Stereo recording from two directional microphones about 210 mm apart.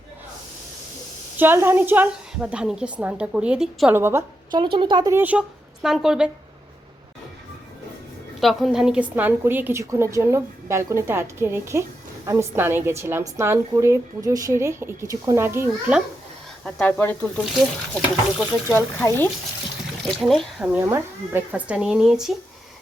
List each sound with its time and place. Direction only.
1.4 s a woman's voice: 10° right (ahead or behind)
8.4 s a woman's voice: centre (ahead or behind)
16.6 s speech: 5° left (ahead or behind)
18.9 s speech: 10° left (ahead or behind)
20.7 s speech: 10° right (ahead or behind)